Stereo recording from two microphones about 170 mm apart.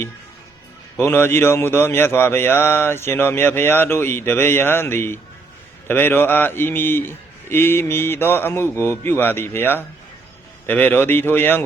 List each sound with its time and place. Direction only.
0.9 s speech: 15° left (ahead or behind)